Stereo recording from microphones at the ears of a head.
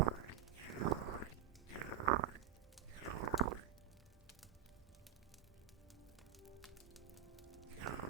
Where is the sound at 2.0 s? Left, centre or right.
Right.